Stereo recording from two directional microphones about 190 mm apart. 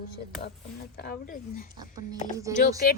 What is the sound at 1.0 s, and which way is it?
Speech, 50° left (ahead or behind).